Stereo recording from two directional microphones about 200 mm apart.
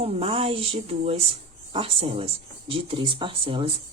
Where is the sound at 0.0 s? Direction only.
30° right (ahead or behind).